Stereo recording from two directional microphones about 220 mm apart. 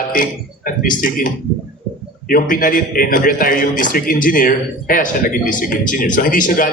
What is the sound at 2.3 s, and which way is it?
Speech, 40° left (ahead or behind).